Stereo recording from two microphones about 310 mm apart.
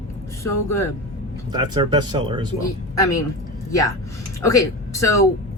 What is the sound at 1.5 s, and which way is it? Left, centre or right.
Speech, centre.